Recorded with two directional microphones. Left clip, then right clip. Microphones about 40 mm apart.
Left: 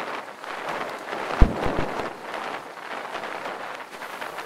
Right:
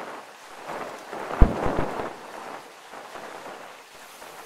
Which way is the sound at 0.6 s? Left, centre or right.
Left.